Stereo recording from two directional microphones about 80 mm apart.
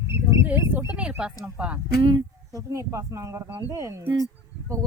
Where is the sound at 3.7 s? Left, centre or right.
Right.